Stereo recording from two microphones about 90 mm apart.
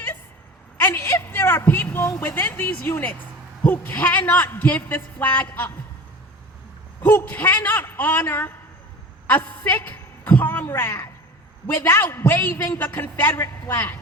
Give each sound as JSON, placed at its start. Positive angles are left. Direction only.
{"t": 0.8, "sound": "a sound", "side_deg": 25}
{"t": 2.2, "sound": "a man's voice", "side_deg": 25}
{"t": 7.0, "sound": "a man's voice", "side_deg": 20}